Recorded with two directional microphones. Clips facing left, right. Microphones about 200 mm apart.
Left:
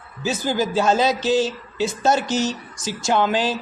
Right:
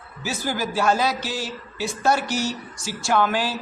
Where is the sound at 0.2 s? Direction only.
20° left (ahead or behind).